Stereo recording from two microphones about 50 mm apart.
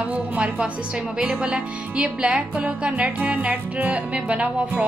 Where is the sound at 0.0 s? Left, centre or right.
Right.